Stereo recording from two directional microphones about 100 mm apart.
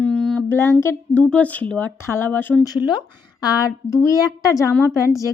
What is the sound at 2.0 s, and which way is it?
Speech, 25° left (ahead or behind).